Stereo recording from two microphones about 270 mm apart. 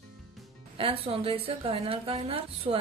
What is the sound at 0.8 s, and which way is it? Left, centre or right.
A woman's voice, right.